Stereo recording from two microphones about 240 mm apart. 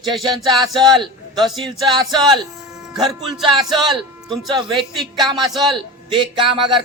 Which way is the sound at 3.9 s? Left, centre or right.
Centre.